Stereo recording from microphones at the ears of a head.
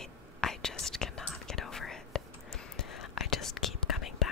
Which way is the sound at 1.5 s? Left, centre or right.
Left.